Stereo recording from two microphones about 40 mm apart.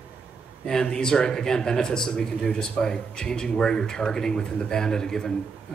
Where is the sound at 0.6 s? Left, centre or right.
Centre.